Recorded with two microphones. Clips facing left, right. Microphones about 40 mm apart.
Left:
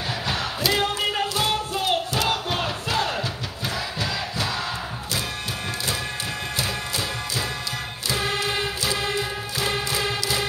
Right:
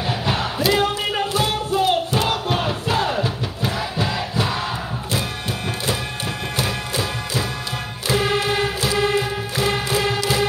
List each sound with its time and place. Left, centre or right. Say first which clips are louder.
0.3 s a sound: right 4 dB; centre
1.4 s music: right 4 dB; centre
2.1 s crowd: right 3 dB; centre
6.6 s music: right 5 dB; right